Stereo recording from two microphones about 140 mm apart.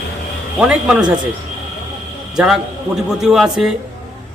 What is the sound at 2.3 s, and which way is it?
A man's voice, 5° right (ahead or behind).